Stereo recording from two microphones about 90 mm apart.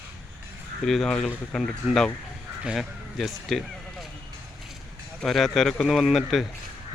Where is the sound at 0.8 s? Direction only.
Centre (ahead or behind).